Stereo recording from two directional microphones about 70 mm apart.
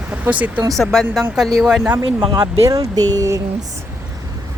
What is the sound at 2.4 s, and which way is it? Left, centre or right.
Speech, right.